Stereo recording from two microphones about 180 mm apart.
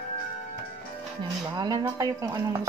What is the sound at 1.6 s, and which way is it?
Speech, 20° right (ahead or behind).